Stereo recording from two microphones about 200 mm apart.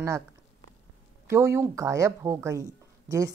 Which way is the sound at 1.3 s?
15° right (ahead or behind).